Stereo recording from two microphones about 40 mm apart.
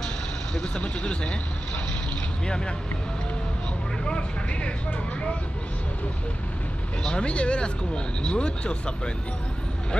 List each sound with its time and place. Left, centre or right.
0.6 s speech: left
2.4 s speech: left
4.0 s speech: left
7.0 s speech: left